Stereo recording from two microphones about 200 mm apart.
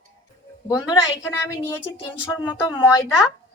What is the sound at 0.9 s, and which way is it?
A woman's voice, 15° left (ahead or behind).